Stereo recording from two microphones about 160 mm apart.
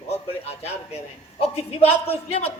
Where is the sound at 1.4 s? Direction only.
40° left (ahead or behind).